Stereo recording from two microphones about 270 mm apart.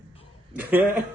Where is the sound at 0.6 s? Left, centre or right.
Centre.